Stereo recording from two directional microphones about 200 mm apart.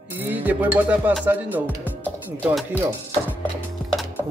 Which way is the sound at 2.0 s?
10° left (ahead or behind).